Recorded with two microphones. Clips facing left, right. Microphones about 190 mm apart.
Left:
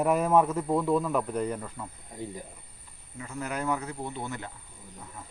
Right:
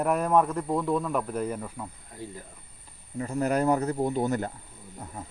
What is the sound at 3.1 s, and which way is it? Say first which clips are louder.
Speech: right 8 dB; 40° right (ahead or behind).